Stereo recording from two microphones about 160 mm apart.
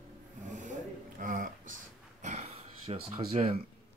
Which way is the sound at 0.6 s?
55° right (ahead or behind).